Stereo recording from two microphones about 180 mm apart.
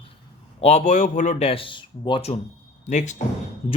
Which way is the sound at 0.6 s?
35° left (ahead or behind).